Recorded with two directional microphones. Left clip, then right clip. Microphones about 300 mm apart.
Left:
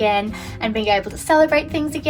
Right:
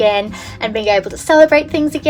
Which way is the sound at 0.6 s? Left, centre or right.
Right.